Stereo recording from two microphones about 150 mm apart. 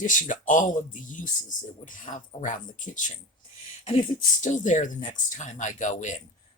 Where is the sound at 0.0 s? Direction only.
60° left (ahead or behind).